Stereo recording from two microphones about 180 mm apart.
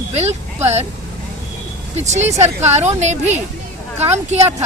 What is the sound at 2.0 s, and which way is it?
A woman's voice, 40° right (ahead or behind).